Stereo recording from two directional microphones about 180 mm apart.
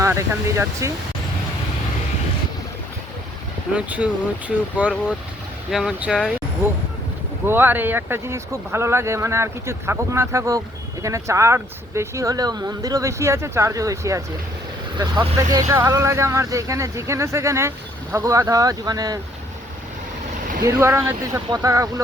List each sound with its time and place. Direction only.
0.0 s speech: 15° right (ahead or behind)
3.8 s speech: 5° right (ahead or behind)
5.7 s speech: 5° right (ahead or behind); by 19.2 s 20° right (ahead or behind)
20.6 s speech: 15° right (ahead or behind)